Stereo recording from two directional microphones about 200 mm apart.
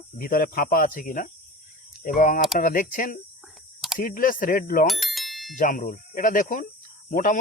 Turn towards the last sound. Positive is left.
turn(degrees=40)  # may be behind; listen again after turning